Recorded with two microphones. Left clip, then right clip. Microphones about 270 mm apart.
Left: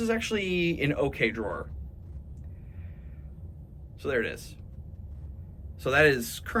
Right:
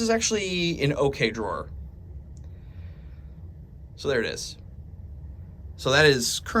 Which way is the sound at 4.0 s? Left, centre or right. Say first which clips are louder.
Right 3 dB; centre.